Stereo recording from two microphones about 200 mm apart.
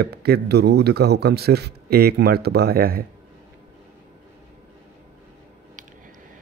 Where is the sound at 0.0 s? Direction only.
50° right (ahead or behind).